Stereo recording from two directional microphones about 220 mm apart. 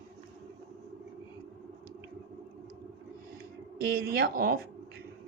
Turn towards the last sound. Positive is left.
turn(degrees=-45)  # may be behind; listen again after turning